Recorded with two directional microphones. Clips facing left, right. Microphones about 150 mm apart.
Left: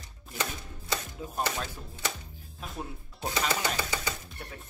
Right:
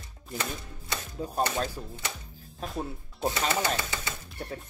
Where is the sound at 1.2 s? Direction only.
35° right (ahead or behind).